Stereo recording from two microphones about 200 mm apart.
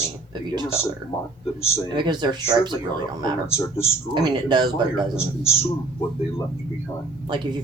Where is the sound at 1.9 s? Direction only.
20° right (ahead or behind).